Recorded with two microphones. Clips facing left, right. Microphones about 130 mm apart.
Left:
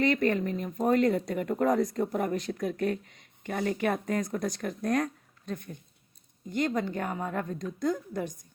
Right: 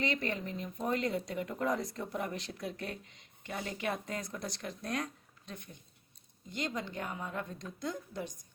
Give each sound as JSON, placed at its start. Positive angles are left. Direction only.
{"t": 0.0, "sound": "speech", "side_deg": 50}